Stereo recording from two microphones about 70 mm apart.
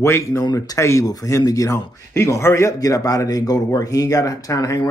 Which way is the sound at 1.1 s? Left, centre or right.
Left.